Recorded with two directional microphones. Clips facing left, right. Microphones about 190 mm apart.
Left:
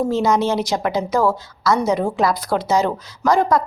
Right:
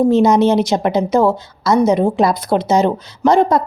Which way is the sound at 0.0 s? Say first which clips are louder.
Right 6 dB; 20° right (ahead or behind).